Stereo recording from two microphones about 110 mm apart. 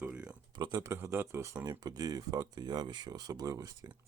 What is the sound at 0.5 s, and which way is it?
Speech, 40° right (ahead or behind).